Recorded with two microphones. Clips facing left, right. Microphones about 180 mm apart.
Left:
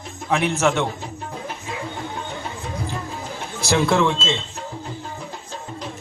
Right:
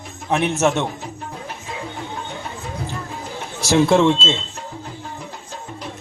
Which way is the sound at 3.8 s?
25° right (ahead or behind).